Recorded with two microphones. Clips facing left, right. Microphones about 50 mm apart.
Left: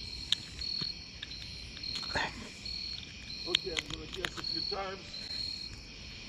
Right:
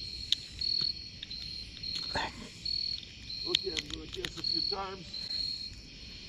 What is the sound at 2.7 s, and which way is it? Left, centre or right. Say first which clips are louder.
Cricket: right 4 dB; left.